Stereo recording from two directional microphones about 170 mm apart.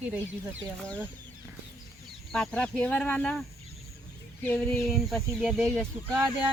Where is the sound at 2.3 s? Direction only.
5° left (ahead or behind).